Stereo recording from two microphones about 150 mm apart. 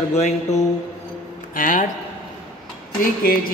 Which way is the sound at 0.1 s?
50° left (ahead or behind).